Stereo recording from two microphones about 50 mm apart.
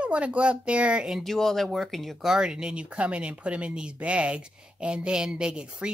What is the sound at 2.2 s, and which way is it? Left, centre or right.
A woman's voice, centre.